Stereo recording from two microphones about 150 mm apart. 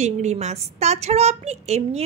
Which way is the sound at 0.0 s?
50° right (ahead or behind).